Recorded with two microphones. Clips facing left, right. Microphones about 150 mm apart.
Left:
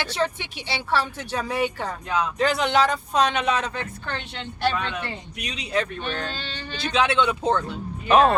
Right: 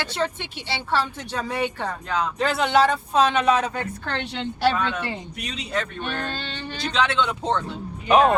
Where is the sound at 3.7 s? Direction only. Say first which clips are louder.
Right 3 dB; 60° right (ahead or behind).